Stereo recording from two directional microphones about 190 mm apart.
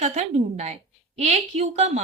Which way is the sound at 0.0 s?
35° right (ahead or behind).